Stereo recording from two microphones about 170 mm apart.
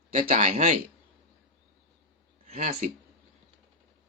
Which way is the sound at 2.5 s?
50° right (ahead or behind).